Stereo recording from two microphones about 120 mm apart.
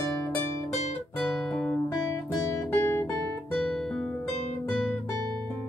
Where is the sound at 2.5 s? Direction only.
20° left (ahead or behind).